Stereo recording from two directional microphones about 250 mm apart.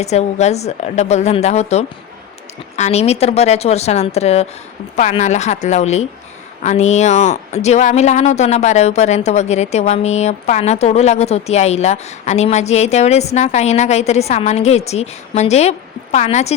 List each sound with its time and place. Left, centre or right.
0.0 s speech: left